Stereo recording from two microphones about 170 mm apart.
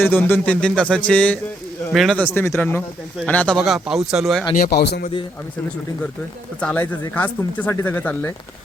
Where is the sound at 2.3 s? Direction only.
15° left (ahead or behind).